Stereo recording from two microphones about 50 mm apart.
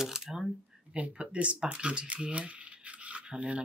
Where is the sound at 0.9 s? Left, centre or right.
Right.